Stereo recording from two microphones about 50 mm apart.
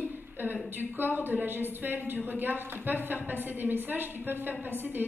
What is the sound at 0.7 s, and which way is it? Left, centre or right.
A woman's voice, right.